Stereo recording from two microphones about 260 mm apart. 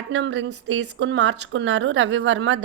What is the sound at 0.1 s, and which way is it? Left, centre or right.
Speech, right.